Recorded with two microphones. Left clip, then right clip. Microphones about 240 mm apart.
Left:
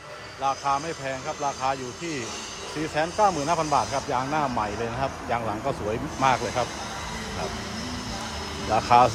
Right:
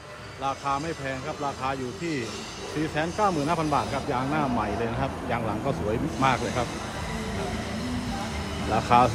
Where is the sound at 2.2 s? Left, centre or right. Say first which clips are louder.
Left 1 dB; right.